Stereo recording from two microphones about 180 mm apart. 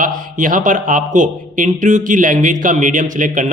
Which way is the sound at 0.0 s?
45° right (ahead or behind).